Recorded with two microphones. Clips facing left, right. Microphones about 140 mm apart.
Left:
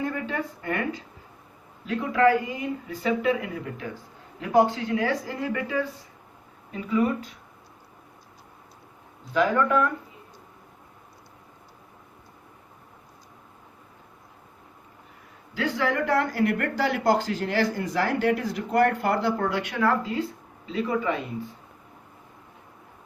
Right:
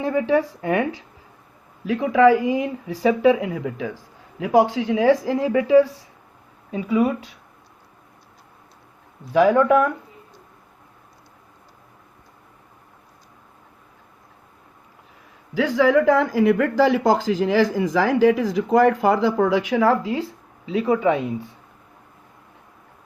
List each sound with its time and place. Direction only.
0.0 s speech: 90° right
6.9 s speech: 70° right (ahead or behind)
15.5 s a man's voice: 90° right